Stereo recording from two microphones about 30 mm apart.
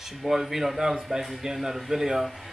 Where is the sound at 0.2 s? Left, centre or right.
Centre.